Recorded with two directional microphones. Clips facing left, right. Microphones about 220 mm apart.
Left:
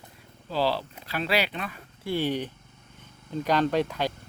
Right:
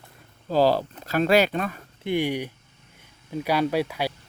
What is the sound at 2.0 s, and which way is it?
Speech, 15° right (ahead or behind).